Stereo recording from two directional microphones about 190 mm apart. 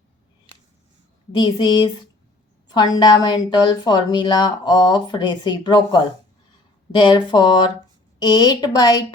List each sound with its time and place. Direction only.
1.3 s speech: 20° left (ahead or behind)
2.6 s a sound: 20° left (ahead or behind)
3.0 s speech: 20° left (ahead or behind)